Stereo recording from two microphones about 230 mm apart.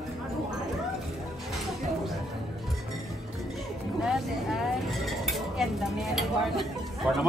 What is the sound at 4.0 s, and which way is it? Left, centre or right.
Dishes, centre.